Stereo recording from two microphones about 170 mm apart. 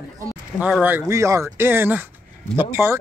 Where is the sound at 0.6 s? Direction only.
5° right (ahead or behind).